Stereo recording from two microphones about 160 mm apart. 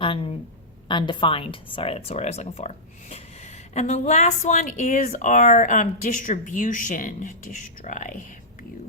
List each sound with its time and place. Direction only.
0.0 s speech: 30° left (ahead or behind); by 8.2 s 55° left (ahead or behind)